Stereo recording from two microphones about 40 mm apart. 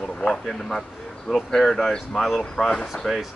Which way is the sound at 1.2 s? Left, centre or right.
Centre.